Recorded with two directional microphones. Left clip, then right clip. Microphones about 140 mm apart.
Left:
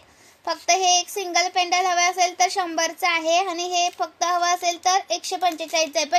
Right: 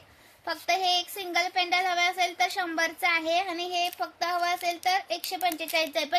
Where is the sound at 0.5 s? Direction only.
15° left (ahead or behind).